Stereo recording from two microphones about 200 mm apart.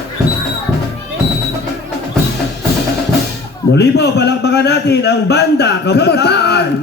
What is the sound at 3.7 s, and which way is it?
A man's voice, 55° left (ahead or behind).